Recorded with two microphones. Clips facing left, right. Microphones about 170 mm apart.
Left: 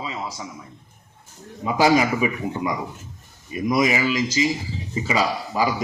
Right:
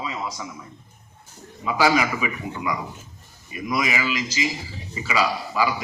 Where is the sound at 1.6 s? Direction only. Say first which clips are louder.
Left 3 dB; 40° left (ahead or behind).